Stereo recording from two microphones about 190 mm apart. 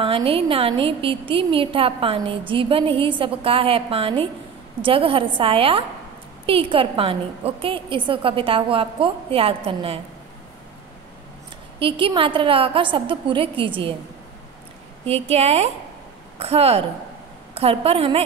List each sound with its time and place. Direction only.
0.0 s a woman's voice: 30° right (ahead or behind)
11.8 s a woman's voice: 25° right (ahead or behind)
15.0 s a woman's voice: 30° right (ahead or behind)